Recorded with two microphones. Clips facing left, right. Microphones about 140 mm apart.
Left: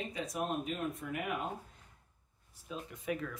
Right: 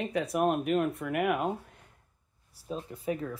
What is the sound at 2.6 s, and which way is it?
Speech, 35° right (ahead or behind).